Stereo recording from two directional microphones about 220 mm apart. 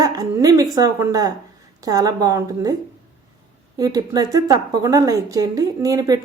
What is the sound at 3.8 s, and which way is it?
Speech, 15° right (ahead or behind).